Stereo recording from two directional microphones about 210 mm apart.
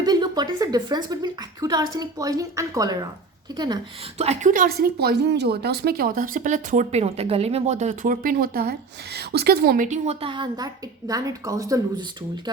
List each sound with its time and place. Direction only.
0.0 s a woman's voice: 20° right (ahead or behind)
4.2 s a woman's voice: 30° right (ahead or behind); by 12.0 s 15° right (ahead or behind)